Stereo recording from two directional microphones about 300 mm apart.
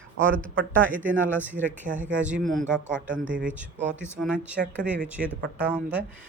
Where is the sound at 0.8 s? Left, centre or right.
Centre.